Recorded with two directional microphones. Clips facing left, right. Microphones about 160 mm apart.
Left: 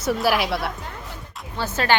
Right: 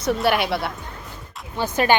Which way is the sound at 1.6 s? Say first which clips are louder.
Right 3 dB; 15° right (ahead or behind).